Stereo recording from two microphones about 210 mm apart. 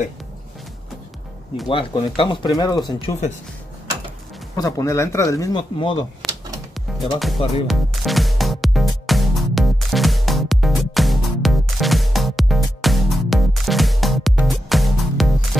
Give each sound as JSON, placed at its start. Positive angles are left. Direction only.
{"t": 1.7, "sound": "speech", "side_deg": 25}
{"t": 4.6, "sound": "speech", "side_deg": 15}
{"t": 7.2, "sound": "speech", "side_deg": 0}
{"t": 7.6, "sound": "music", "side_deg": 0}